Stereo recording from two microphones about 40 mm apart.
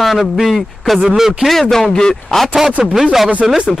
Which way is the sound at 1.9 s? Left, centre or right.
Centre.